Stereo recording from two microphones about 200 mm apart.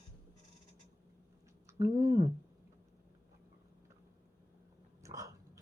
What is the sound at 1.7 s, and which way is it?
Speech, 15° right (ahead or behind).